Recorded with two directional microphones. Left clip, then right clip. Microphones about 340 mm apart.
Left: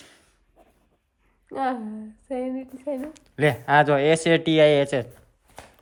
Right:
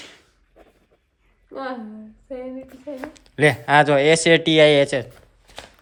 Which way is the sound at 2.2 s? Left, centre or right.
Left.